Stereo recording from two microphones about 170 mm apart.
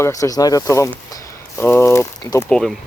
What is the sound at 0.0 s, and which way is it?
Speech, 20° left (ahead or behind).